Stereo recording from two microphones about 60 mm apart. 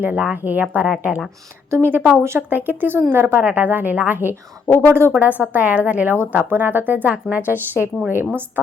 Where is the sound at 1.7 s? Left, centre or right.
Right.